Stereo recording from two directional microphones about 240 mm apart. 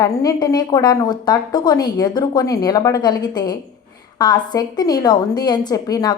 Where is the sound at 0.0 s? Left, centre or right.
Centre.